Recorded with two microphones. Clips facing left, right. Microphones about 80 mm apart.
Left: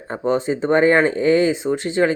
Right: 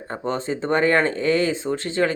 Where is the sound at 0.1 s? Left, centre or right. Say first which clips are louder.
Left 6 dB; centre.